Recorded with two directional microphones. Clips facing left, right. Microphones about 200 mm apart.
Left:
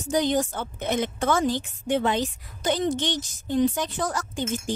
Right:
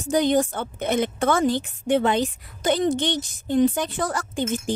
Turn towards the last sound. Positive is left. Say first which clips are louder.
# right 2 dB
turn(degrees=-55)  # may be behind; listen again after turning